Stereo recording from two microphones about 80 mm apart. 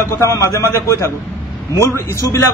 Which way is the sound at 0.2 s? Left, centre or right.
Left.